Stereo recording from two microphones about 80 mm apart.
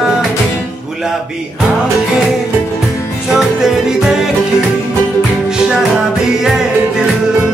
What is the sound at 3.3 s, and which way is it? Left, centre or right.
Music, centre.